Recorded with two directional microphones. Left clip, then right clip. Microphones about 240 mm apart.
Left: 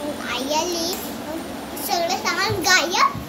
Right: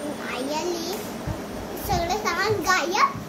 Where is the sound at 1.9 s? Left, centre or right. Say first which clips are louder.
Left 3 dB; centre.